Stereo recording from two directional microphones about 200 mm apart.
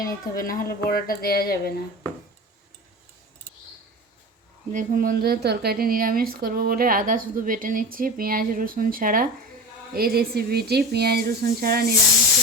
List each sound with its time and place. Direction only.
0.3 s speech: 45° left (ahead or behind)
4.7 s a woman's voice: 40° right (ahead or behind)